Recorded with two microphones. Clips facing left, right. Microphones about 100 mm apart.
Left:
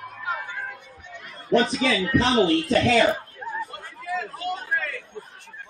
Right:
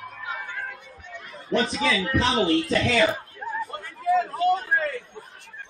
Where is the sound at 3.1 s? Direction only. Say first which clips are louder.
Left 2 dB; centre (ahead or behind).